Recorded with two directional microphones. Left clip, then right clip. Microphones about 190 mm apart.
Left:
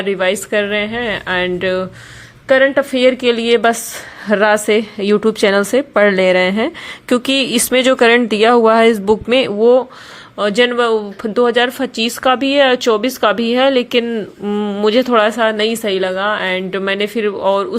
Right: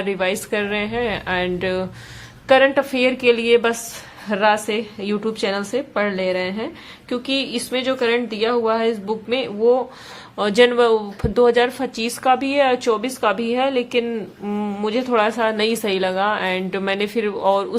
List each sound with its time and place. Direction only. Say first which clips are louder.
0.0 s a woman's voice: left 6 dB; 15° left (ahead or behind)
10.3 s speech: left 2 dB; 10° left (ahead or behind)